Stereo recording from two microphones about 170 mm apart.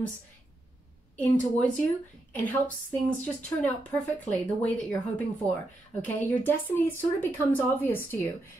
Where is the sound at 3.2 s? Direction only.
10° left (ahead or behind).